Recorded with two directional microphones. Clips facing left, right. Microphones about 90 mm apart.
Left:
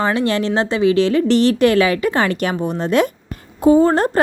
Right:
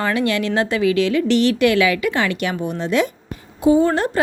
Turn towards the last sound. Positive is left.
turn(degrees=40)  # may be behind; listen again after turning